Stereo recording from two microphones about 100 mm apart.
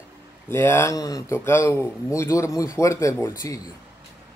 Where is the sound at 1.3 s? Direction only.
25° left (ahead or behind).